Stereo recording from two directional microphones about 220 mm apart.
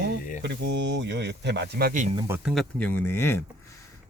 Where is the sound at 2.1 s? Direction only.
10° right (ahead or behind).